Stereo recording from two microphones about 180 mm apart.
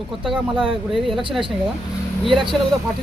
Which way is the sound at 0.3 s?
30° right (ahead or behind).